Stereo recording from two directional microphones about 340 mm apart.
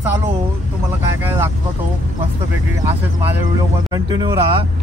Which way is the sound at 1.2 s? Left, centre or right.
Centre.